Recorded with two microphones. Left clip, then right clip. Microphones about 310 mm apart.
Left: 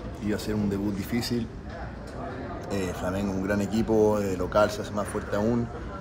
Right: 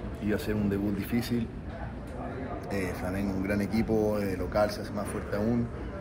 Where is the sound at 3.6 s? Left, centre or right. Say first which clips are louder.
Left 7 dB; left.